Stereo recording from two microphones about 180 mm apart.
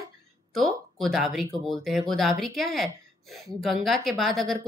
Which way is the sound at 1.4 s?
20° right (ahead or behind).